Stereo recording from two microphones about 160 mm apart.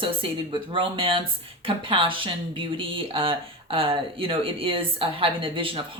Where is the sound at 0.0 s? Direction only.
35° right (ahead or behind).